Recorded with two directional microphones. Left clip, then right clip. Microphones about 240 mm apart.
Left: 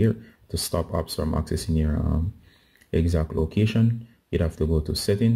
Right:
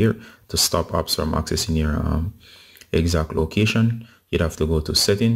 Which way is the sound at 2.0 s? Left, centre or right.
Centre.